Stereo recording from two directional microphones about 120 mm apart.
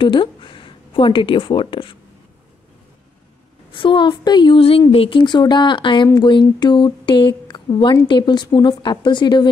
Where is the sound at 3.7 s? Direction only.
45° left (ahead or behind).